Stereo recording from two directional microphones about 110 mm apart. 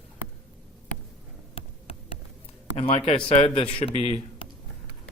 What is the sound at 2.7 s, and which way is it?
A man's voice, 55° left (ahead or behind).